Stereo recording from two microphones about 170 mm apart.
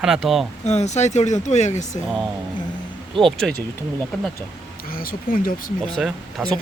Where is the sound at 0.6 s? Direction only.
40° left (ahead or behind).